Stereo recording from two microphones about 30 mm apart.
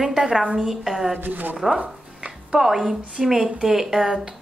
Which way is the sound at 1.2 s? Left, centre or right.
Right.